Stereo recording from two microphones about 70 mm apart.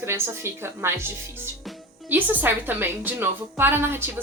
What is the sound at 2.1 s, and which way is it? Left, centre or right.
A woman's voice, right.